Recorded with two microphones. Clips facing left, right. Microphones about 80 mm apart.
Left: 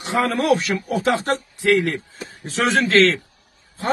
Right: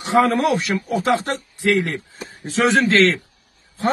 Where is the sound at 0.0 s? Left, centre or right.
Right.